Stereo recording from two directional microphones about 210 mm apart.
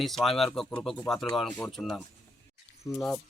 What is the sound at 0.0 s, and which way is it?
Speech, centre (ahead or behind).